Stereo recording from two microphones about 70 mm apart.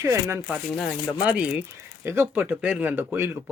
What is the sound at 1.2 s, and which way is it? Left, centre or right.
Speech, centre.